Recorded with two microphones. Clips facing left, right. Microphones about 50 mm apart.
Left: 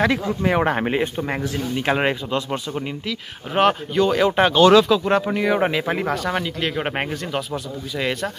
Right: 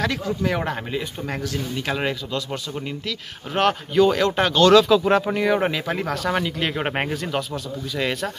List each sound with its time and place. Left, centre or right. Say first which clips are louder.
0.0 s a man's voice: left 4 dB; left
1.2 s a man's voice: left 3 dB; left
3.1 s speech: left 2 dB; centre
4.8 s speech: right 1 dB; centre